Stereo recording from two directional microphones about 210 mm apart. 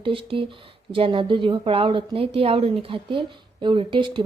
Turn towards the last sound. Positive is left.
turn(degrees=-25)  # may be behind; listen again after turning